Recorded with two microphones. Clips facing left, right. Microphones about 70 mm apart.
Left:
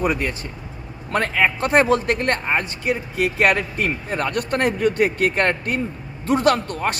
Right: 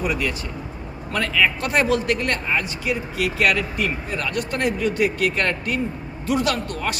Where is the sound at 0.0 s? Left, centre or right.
Left.